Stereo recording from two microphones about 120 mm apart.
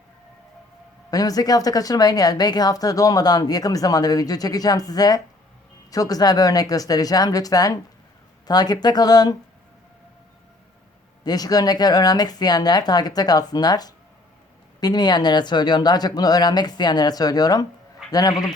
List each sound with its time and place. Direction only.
1.1 s speech: 30° left (ahead or behind)
11.2 s speech: 35° left (ahead or behind)